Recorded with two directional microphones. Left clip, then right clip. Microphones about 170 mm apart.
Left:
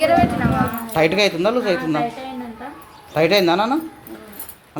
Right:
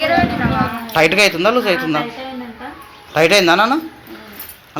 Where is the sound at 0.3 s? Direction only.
35° left (ahead or behind).